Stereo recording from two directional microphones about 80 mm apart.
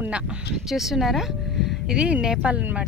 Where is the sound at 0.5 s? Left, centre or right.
Centre.